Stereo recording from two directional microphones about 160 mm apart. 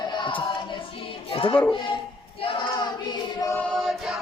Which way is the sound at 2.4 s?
30° left (ahead or behind).